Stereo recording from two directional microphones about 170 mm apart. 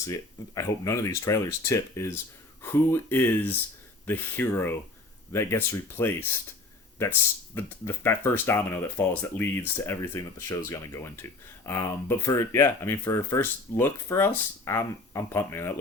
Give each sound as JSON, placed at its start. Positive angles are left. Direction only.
{"t": 0.1, "sound": "speech", "side_deg": 20}